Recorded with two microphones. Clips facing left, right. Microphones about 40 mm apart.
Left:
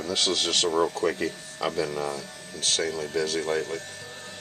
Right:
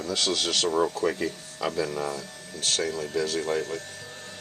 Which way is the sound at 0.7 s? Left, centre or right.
Centre.